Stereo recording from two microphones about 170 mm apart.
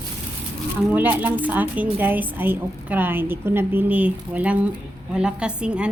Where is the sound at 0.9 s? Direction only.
10° right (ahead or behind).